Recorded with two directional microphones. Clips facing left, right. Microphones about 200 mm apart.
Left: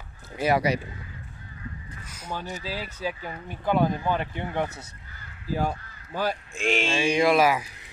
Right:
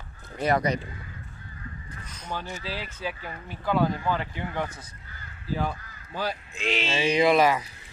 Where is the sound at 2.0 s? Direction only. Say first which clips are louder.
Even; 10° left (ahead or behind).